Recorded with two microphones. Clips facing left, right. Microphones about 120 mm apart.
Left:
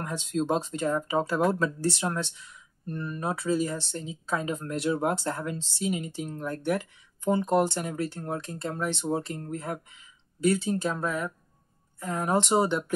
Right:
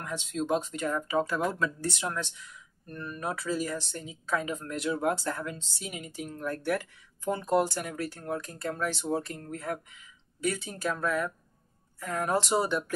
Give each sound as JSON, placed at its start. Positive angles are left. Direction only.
{"t": 0.0, "sound": "speech", "side_deg": 35}